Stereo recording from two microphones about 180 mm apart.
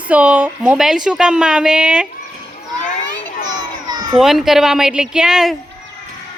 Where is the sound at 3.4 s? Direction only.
20° right (ahead or behind).